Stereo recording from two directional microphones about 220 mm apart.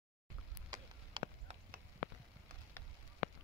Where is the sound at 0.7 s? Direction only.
20° right (ahead or behind).